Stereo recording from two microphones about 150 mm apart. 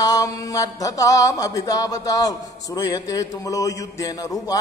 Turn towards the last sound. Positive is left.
turn(degrees=25)  # may be behind; listen again after turning